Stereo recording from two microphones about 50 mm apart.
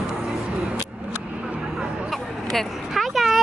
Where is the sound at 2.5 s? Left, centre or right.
Centre.